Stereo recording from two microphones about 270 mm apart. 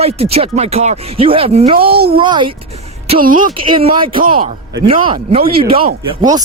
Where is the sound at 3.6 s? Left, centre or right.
Centre.